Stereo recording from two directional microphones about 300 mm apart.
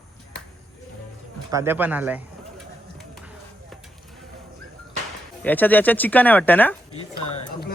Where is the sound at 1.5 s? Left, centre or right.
Centre.